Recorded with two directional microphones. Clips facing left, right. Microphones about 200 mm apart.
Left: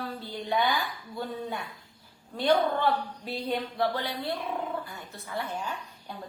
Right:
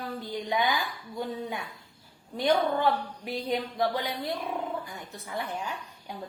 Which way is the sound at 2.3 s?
15° right (ahead or behind).